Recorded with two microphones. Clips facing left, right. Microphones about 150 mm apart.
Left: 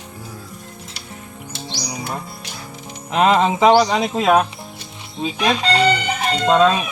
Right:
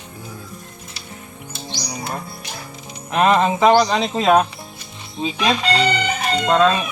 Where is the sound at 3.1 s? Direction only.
15° left (ahead or behind); by 5.6 s 5° right (ahead or behind).